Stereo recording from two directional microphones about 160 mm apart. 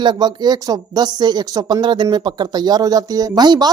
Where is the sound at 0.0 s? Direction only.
25° right (ahead or behind).